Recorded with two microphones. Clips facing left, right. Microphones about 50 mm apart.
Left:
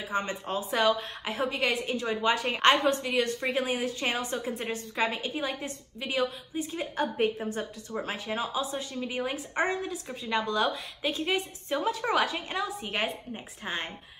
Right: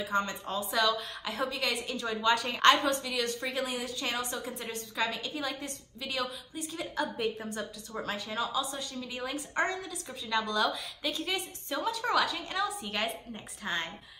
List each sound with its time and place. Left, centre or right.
0.0 s a woman's voice: left